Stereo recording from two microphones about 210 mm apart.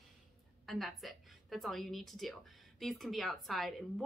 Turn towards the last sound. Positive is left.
turn(degrees=0)  # may be behind; listen again after turning